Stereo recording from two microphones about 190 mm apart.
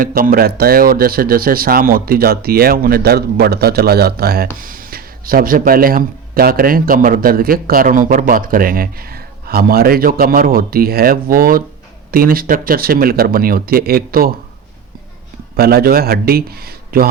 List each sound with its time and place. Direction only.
0.0 s speech: 50° right (ahead or behind)
15.5 s a man's voice: 55° right (ahead or behind)